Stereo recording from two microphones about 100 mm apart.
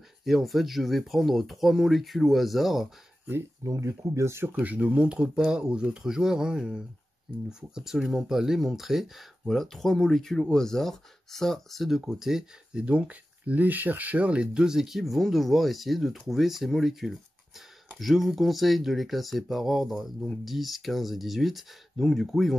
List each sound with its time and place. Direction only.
0.2 s speech: centre (ahead or behind)
3.6 s speech: 35° right (ahead or behind)
4.5 s speech: 15° right (ahead or behind)